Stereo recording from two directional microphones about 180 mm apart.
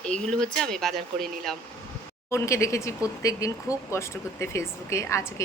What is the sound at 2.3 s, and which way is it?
A woman's voice, 15° left (ahead or behind).